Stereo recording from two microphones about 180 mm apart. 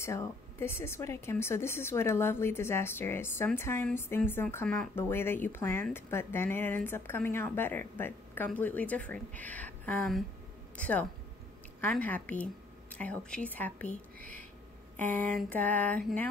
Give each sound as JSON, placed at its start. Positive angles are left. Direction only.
{"t": 0.0, "sound": "speech", "side_deg": 15}
{"t": 15.0, "sound": "speech", "side_deg": 10}